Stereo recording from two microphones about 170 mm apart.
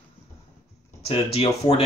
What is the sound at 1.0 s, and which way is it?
Speech, 35° left (ahead or behind).